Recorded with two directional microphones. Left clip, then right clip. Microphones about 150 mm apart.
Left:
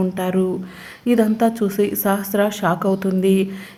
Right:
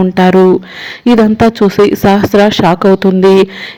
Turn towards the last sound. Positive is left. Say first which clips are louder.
# right 12 dB
turn(degrees=-35)  # may be behind; listen again after turning